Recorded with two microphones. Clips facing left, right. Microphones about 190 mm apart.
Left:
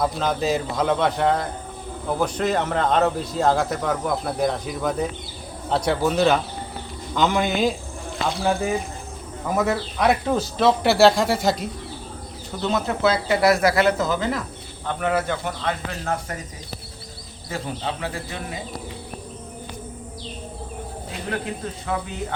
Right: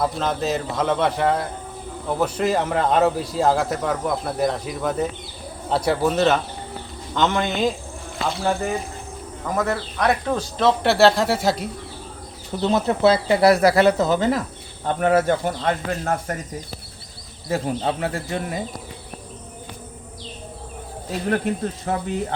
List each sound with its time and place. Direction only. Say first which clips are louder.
0.0 s speech: even; centre (ahead or behind)
12.7 s speech: right 4 dB; 35° right (ahead or behind)
17.5 s speech: right 6 dB; 40° right (ahead or behind)
21.9 s speech: right 1 dB; 40° right (ahead or behind)